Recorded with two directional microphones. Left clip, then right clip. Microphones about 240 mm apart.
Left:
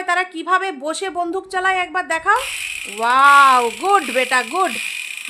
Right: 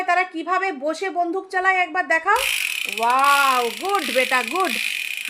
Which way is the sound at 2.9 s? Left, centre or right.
Left.